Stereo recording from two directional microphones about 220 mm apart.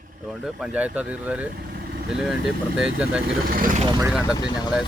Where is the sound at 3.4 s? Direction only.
40° right (ahead or behind).